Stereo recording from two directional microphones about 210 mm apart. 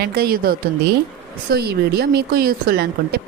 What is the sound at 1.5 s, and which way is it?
Speech, 50° right (ahead or behind).